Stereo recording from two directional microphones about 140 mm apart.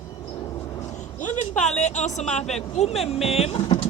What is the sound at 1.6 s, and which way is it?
A man's voice, 55° left (ahead or behind).